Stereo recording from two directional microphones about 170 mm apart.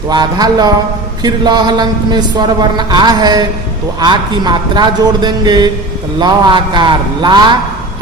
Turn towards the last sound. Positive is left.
turn(degrees=-25)  # may be behind; listen again after turning